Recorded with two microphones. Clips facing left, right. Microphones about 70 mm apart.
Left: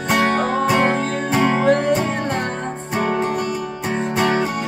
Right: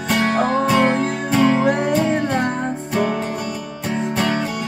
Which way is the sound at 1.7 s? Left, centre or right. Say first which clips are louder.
Left 1 dB; centre.